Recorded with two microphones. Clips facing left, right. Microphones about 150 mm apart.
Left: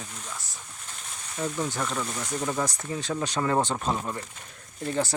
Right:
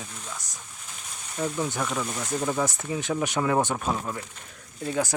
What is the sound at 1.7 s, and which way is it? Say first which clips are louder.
Speech: right 1 dB; 5° right (ahead or behind).